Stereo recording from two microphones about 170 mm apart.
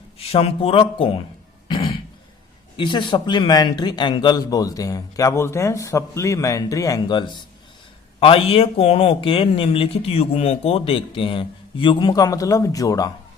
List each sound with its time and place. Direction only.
0.2 s speech: 35° left (ahead or behind)
1.6 s cough: 25° left (ahead or behind)
2.7 s speech: 30° left (ahead or behind)